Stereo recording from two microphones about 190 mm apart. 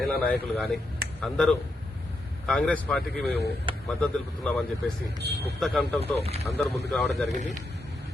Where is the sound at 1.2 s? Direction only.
Centre (ahead or behind).